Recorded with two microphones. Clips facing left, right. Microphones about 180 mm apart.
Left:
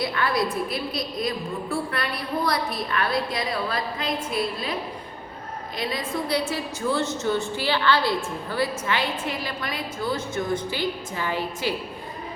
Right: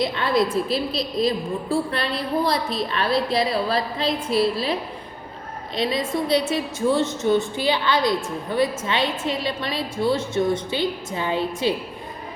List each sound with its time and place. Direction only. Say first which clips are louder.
0.0 s a woman's voice: right 4 dB; 25° right (ahead or behind)
5.7 s a woman's voice: right 5 dB; 25° right (ahead or behind)